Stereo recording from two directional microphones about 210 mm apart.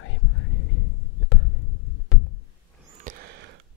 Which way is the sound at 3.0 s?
45° right (ahead or behind).